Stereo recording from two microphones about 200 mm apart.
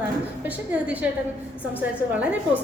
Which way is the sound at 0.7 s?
5° right (ahead or behind).